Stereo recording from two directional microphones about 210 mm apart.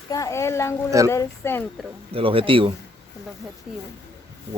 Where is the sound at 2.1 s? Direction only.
25° right (ahead or behind).